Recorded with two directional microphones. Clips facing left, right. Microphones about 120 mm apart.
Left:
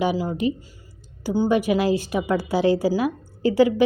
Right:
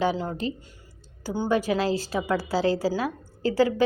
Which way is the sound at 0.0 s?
10° left (ahead or behind).